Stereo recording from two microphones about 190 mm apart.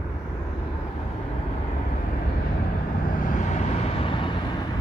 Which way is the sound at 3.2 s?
40° left (ahead or behind).